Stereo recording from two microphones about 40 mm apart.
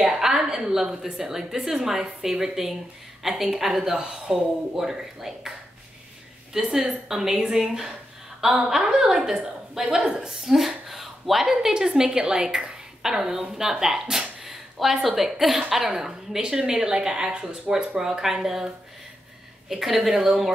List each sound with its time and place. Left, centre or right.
0.0 s a woman's voice: centre
6.5 s a woman's voice: centre
10.9 s a sound: centre
11.5 s a woman's voice: centre
18.0 s a woman's voice: centre
19.7 s a woman's voice: centre